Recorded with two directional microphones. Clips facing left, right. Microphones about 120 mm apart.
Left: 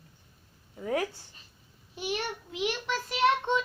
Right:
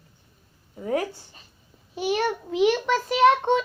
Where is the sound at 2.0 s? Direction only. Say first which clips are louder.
Right 9 dB; 90° right.